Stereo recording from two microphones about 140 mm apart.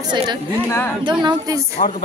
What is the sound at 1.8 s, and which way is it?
Speech, 80° left.